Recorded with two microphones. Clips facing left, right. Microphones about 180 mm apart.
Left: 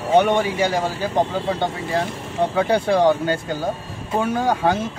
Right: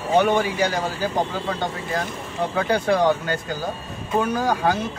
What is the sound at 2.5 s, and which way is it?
Speech, 25° left (ahead or behind).